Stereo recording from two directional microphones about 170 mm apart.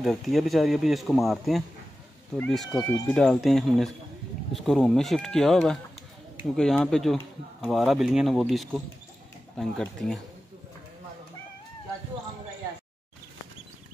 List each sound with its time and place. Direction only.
0.0 s speech: centre (ahead or behind)